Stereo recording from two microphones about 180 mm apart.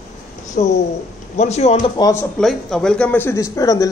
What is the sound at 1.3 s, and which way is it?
Speech, 40° left (ahead or behind).